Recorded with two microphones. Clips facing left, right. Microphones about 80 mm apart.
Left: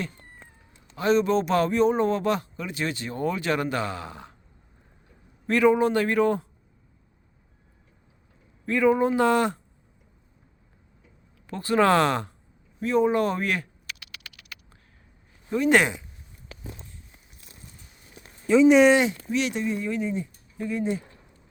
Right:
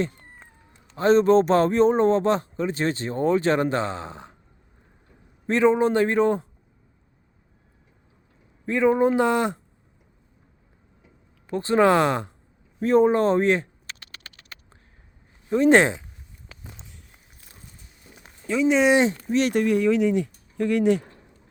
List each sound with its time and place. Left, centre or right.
0.9 s speech: right
5.5 s a man's voice: right
8.6 s a man's voice: right
11.0 s a sound: right
12.8 s typing: right
15.5 s a man's voice: right
18.4 s speech: centre
18.9 s speech: right
19.6 s speech: right